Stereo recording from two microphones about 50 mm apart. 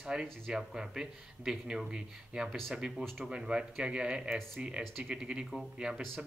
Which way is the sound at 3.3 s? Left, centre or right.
Centre.